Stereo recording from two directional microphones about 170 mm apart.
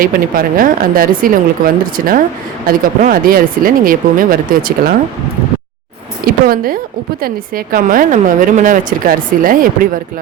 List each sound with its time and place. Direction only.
0.0 s speech: 55° right (ahead or behind)
6.2 s a woman's voice: 60° right (ahead or behind)